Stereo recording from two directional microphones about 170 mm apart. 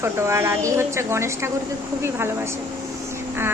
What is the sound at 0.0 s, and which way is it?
A child's voice, 15° right (ahead or behind).